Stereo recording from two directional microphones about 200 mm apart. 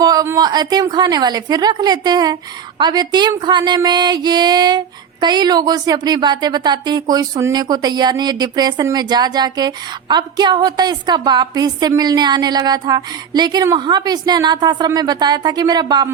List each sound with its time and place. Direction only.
0.0 s a woman's voice: 20° right (ahead or behind)